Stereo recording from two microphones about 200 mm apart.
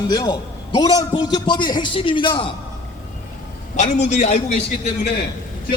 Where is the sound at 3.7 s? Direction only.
35° left (ahead or behind).